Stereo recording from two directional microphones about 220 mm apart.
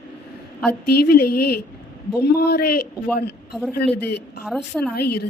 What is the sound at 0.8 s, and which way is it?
Speech, 45° left (ahead or behind).